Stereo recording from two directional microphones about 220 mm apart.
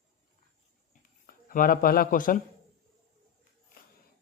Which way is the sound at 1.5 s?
40° left (ahead or behind).